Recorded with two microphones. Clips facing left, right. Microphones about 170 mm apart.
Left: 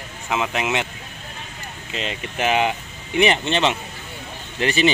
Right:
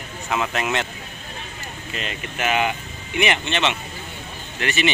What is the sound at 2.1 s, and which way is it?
Speech, 30° left (ahead or behind).